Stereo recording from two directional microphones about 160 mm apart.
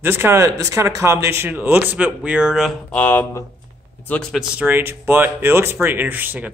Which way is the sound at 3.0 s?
10° left (ahead or behind).